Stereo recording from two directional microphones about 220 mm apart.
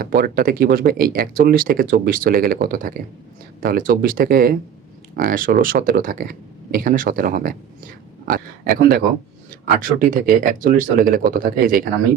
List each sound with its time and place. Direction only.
0.0 s speech: 40° right (ahead or behind)